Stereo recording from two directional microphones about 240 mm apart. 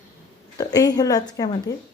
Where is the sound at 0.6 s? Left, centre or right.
Centre.